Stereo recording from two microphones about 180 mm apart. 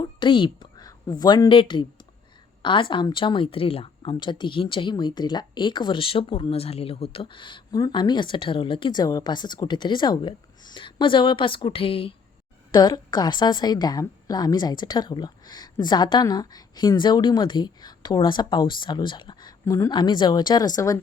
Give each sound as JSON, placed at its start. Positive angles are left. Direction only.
{"t": 0.0, "sound": "a woman's voice", "side_deg": 25}